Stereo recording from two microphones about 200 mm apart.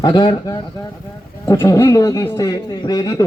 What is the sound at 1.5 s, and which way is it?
Speech, 15° left (ahead or behind).